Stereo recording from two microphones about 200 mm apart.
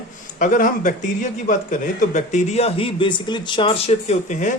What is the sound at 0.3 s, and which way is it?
Speech, 40° left (ahead or behind).